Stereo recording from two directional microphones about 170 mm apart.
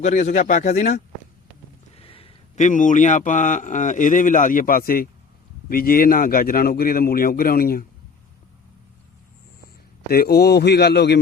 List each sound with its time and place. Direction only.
0.0 s a man's voice: 45° left (ahead or behind)
2.0 s a sound: 35° left (ahead or behind)
2.6 s a man's voice: 50° left (ahead or behind)
10.1 s a man's voice: 65° left (ahead or behind)